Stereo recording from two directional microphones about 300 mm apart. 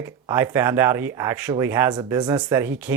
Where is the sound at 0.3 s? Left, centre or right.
Centre.